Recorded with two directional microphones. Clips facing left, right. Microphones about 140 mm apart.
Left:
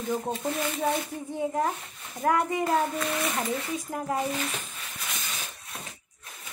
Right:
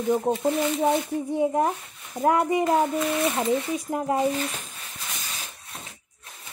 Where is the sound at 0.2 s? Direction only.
25° right (ahead or behind).